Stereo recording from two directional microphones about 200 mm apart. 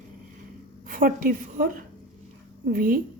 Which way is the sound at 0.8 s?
45° right (ahead or behind).